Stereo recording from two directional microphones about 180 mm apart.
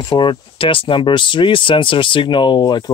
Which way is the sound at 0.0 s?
25° left (ahead or behind).